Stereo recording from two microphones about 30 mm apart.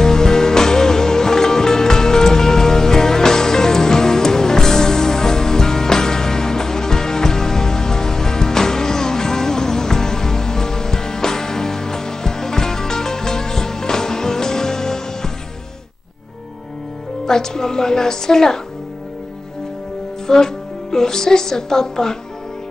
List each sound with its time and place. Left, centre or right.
0.0 s music: centre
17.3 s music: centre
20.2 s a woman's voice: centre